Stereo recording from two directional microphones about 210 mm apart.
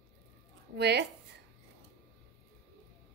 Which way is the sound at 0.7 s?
50° right (ahead or behind).